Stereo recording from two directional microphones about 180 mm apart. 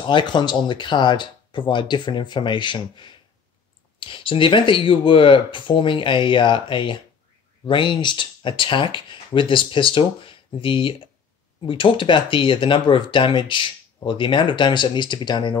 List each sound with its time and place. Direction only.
0.0 s speech: 25° left (ahead or behind)